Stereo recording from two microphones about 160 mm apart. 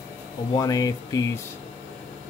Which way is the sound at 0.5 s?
25° left (ahead or behind).